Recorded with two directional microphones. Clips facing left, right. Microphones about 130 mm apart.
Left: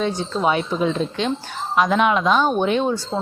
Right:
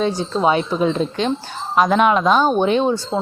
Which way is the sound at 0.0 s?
30° right (ahead or behind).